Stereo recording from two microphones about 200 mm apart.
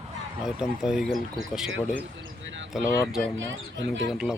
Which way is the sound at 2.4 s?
70° right (ahead or behind).